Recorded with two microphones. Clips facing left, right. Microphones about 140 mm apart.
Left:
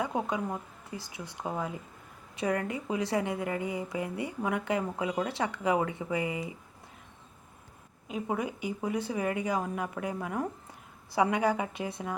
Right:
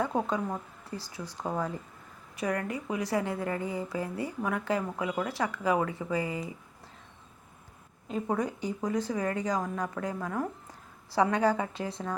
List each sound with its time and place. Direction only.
0.0 s speech: 15° left (ahead or behind)
2.3 s a woman's voice: 25° left (ahead or behind)
8.0 s speech: 10° left (ahead or behind)